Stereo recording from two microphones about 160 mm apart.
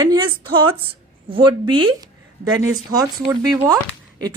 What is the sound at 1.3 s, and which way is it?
Speech, 30° right (ahead or behind).